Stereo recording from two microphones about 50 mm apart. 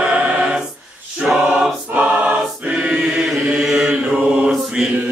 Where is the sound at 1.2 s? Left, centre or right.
Centre.